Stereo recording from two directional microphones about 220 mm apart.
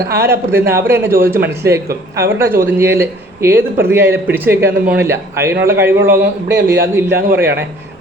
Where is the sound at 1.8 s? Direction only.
45° right (ahead or behind).